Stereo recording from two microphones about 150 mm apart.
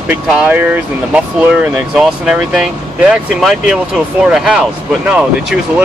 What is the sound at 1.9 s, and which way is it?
Speech, 5° right (ahead or behind).